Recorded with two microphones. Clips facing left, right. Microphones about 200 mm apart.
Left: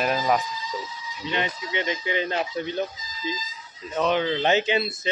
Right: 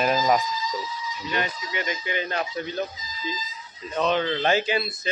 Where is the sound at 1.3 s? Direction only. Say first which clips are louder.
Left 2 dB; 25° left (ahead or behind).